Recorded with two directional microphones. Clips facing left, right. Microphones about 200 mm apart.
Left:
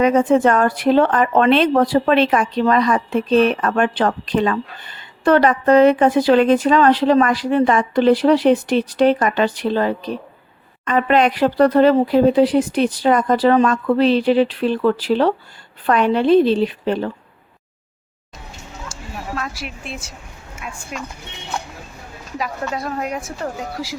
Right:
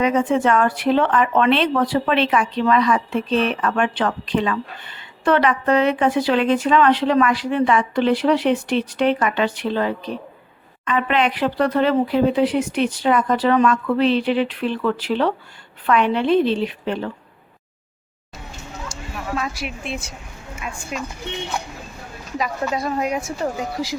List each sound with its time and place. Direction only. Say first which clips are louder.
0.0 s speech: left 4 dB; 40° left (ahead or behind)
19.4 s a woman's voice: right 2 dB; centre (ahead or behind)
22.4 s a woman's voice: right 2 dB; centre (ahead or behind)